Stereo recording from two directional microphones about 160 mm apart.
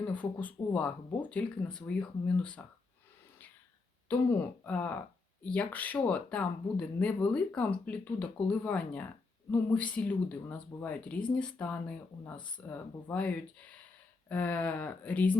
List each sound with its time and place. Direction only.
0.1 s speech: 10° left (ahead or behind)
4.4 s speech: 10° left (ahead or behind)